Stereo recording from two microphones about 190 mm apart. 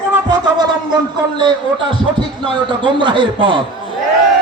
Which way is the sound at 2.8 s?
25° right (ahead or behind).